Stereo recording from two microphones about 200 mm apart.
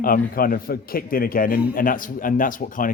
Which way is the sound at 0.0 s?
45° left (ahead or behind).